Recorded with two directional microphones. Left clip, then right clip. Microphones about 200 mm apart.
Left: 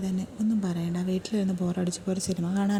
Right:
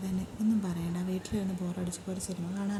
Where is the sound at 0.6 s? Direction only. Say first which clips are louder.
Left 4 dB; 25° left (ahead or behind).